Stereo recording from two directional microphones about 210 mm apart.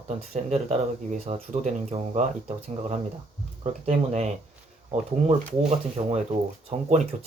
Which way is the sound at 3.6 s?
30° right (ahead or behind).